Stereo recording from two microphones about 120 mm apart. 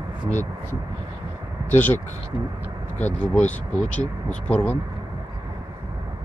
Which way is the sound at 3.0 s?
10° left (ahead or behind).